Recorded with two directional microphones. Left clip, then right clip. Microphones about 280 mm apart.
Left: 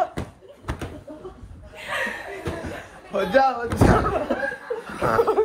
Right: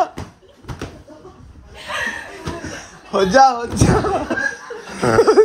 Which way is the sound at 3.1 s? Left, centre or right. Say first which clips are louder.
Right 7 dB; right.